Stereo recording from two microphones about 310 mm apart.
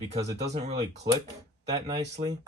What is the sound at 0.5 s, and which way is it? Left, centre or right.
Speech, right.